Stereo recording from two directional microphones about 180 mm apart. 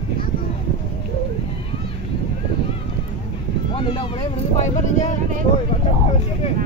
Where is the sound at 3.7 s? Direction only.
30° left (ahead or behind).